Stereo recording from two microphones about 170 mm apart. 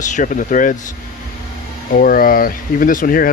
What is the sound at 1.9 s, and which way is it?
Speech, 55° left (ahead or behind).